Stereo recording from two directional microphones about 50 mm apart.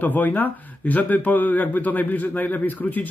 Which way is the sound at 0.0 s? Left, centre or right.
Left.